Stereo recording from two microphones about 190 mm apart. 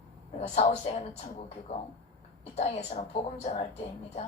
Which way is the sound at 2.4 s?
35° left (ahead or behind).